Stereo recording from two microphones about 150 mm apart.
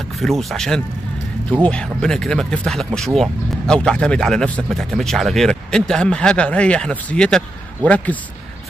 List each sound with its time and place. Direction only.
0.2 s speech: centre (ahead or behind)